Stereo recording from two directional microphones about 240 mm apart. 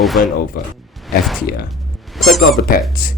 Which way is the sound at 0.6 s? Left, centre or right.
Left.